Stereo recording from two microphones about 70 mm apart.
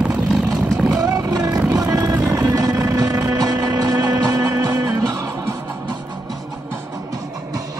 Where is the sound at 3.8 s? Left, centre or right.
Right.